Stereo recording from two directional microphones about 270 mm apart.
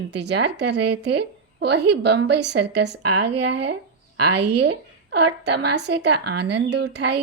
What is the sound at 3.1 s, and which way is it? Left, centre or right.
Speech, right.